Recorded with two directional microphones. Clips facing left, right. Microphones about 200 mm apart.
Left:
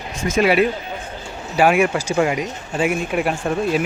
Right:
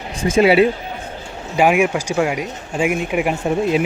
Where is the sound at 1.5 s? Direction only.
15° right (ahead or behind).